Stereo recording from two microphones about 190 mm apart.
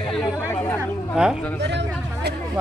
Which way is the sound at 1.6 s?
65° right (ahead or behind).